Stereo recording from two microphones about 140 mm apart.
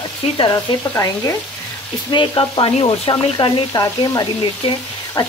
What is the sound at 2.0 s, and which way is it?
Speech, 35° left (ahead or behind).